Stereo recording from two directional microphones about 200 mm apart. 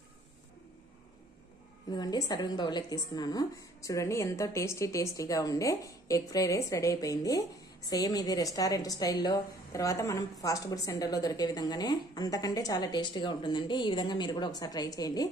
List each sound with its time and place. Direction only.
1.9 s a woman's voice: 20° left (ahead or behind)